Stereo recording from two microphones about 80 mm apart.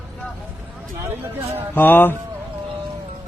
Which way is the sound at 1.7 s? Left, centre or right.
Left.